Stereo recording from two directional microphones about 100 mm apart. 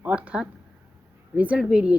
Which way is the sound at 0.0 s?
15° right (ahead or behind).